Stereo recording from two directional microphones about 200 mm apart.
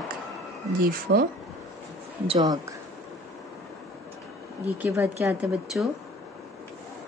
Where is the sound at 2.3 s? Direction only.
20° right (ahead or behind).